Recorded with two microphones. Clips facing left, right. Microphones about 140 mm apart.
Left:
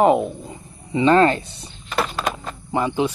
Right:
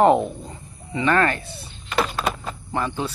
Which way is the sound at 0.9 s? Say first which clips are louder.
Left 5 dB; 25° left (ahead or behind).